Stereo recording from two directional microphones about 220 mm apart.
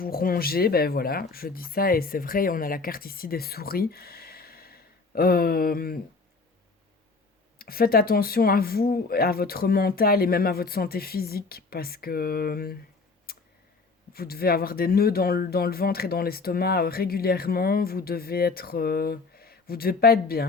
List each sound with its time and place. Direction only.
0.0 s speech: 40° left (ahead or behind)
7.6 s speech: 45° left (ahead or behind)
13.3 s a sound: 45° left (ahead or behind)
14.1 s speech: 45° left (ahead or behind)